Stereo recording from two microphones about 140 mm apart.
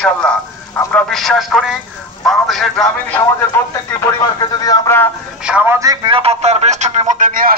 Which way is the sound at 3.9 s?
20° left (ahead or behind).